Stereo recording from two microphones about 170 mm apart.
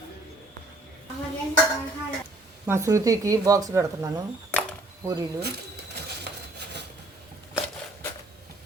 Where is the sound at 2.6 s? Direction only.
15° right (ahead or behind).